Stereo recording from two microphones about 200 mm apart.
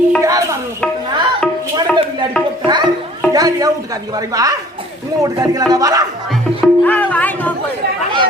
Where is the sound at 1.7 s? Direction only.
25° right (ahead or behind).